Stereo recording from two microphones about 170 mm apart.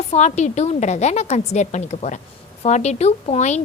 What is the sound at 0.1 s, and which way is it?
A woman's voice, 45° left (ahead or behind).